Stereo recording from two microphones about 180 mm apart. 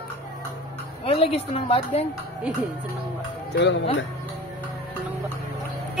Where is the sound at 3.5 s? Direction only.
80° left.